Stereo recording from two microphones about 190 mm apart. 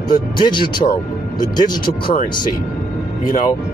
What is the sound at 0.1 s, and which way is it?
Speech, 25° left (ahead or behind).